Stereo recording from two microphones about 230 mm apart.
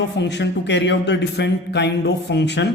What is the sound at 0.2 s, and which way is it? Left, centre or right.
Speech, left.